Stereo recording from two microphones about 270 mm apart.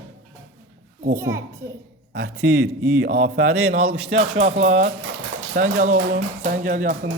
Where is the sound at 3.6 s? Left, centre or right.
Centre.